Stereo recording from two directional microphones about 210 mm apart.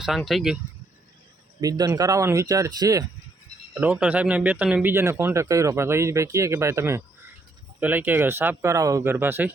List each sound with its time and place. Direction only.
0.0 s speech: centre (ahead or behind)
1.6 s a man's voice: 15° right (ahead or behind)
3.8 s a man's voice: 5° right (ahead or behind)